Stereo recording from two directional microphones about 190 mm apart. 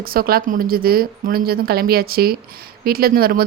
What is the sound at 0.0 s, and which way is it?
Speech, 50° right (ahead or behind).